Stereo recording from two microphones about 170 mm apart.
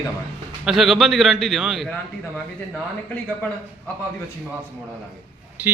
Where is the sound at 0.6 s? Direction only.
Centre (ahead or behind).